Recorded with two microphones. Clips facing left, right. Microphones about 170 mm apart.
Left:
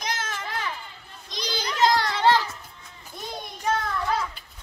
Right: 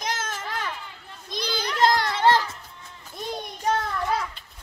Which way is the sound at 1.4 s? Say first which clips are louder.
Right 1 dB; 55° right (ahead or behind).